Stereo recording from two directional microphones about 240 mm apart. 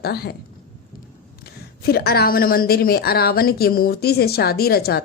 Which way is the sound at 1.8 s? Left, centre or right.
Left.